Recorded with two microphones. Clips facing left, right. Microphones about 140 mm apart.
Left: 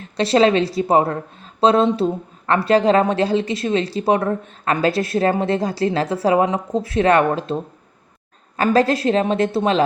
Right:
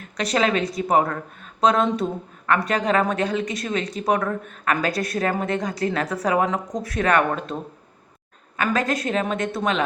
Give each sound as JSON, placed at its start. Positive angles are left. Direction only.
{"t": 0.0, "sound": "a woman's voice", "side_deg": 30}